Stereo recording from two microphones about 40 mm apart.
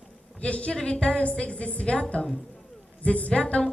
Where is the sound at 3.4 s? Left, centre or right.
Centre.